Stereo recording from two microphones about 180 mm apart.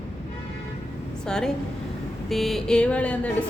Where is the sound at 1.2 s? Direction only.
5° left (ahead or behind).